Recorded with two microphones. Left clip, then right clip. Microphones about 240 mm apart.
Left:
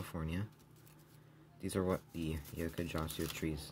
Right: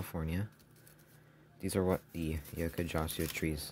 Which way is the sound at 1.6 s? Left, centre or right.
Centre.